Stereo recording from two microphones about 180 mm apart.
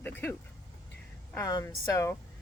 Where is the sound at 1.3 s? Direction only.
20° left (ahead or behind).